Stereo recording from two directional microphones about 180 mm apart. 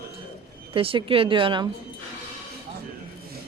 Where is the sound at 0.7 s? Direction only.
30° right (ahead or behind).